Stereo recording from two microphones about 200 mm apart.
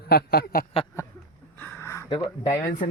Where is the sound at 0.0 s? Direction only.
50° left (ahead or behind).